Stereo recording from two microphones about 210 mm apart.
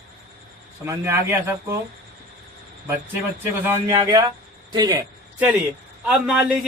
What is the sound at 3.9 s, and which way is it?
Speech, 20° right (ahead or behind).